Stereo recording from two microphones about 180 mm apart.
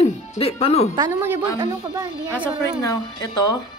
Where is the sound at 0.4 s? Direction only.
35° left (ahead or behind).